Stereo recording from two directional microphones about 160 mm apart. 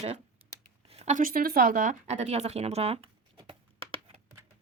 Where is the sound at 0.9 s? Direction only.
40° right (ahead or behind).